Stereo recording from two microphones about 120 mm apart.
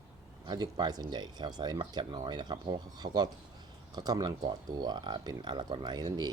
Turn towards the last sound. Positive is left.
turn(degrees=-35)  # may be behind; listen again after turning